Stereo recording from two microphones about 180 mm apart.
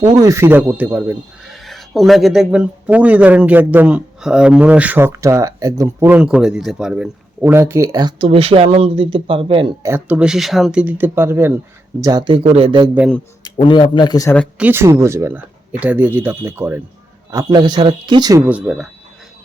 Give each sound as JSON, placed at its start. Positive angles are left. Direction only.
{"t": 0.1, "sound": "speech", "side_deg": -20}
{"t": 1.5, "sound": "speech", "side_deg": 0}
{"t": 9.8, "sound": "speech", "side_deg": -10}
{"t": 13.4, "sound": "a man's voice", "side_deg": 25}
{"t": 14.6, "sound": "speech", "side_deg": -15}
{"t": 17.3, "sound": "a man's voice", "side_deg": -25}
{"t": 18.4, "sound": "speech", "side_deg": -5}